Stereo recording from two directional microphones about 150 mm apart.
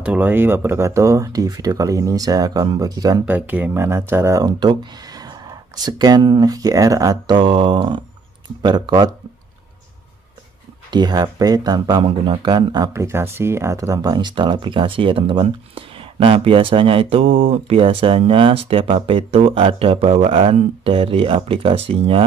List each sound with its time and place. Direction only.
0.0 s speech: 10° right (ahead or behind); by 3.2 s 25° right (ahead or behind)
3.3 s speech: 10° right (ahead or behind); by 9.1 s 30° right (ahead or behind)
10.9 s speech: 30° right (ahead or behind)